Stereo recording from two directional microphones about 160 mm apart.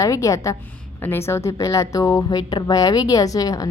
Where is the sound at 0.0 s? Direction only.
20° left (ahead or behind).